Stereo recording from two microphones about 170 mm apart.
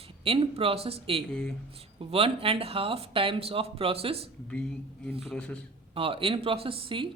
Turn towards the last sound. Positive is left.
turn(degrees=-30)  # may be behind; listen again after turning